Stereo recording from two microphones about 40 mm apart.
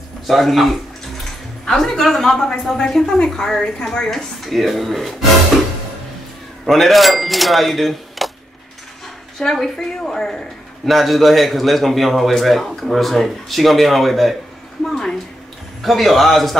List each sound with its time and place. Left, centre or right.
0.3 s a sound: centre
1.7 s speech: centre
4.1 s a man's voice: centre
5.5 s music: centre
6.6 s a man's voice: centre
9.4 s speech: centre
10.9 s a man's voice: centre